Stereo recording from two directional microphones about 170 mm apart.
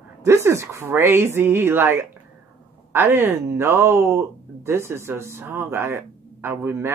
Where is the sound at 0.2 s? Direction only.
15° right (ahead or behind).